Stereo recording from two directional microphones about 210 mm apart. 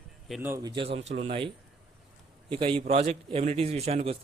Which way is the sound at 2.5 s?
25° right (ahead or behind).